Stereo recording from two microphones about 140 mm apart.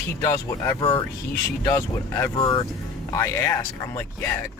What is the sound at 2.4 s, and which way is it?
Speech, 35° left (ahead or behind).